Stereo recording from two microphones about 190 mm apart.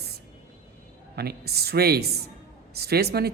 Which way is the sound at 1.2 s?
55° right (ahead or behind).